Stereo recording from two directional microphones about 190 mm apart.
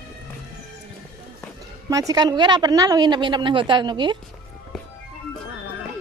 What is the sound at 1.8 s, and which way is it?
A woman's voice, 20° right (ahead or behind).